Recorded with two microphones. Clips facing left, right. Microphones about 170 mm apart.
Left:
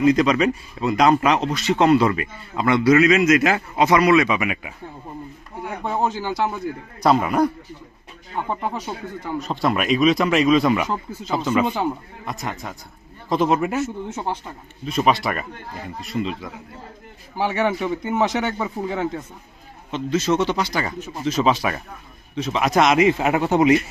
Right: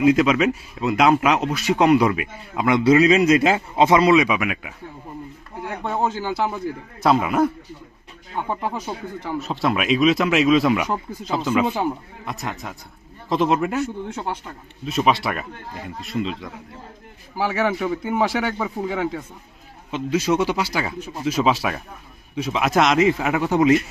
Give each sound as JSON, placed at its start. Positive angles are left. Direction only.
{"t": 0.0, "sound": "speech", "side_deg": -5}
{"t": 2.8, "sound": "a man's voice", "side_deg": -30}
{"t": 4.4, "sound": "a man's voice", "side_deg": 0}
{"t": 10.8, "sound": "speech", "side_deg": -15}
{"t": 11.3, "sound": "a man's voice", "side_deg": 0}
{"t": 17.5, "sound": "a man's voice", "side_deg": 0}
{"t": 23.0, "sound": "speech", "side_deg": 20}